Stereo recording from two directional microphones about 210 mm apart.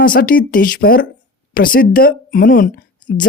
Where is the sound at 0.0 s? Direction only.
45° left (ahead or behind).